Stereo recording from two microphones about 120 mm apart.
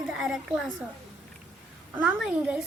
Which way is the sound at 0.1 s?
5° right (ahead or behind).